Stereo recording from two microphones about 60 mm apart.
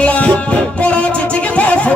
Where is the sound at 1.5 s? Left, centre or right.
Left.